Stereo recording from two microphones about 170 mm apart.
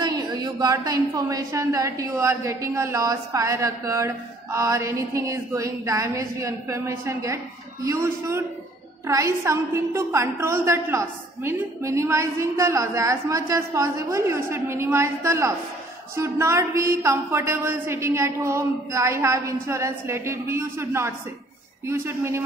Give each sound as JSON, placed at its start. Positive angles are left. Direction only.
{"t": 0.0, "sound": "a woman's voice", "side_deg": -25}